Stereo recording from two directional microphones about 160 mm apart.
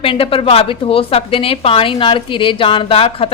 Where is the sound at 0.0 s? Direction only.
35° left (ahead or behind).